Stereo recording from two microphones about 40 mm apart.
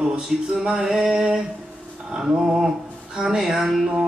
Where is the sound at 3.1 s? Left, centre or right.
Centre.